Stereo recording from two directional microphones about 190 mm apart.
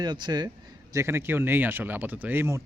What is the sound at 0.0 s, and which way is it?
A man's voice, 20° right (ahead or behind).